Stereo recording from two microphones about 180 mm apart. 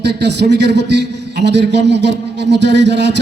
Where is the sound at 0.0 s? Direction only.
70° right (ahead or behind).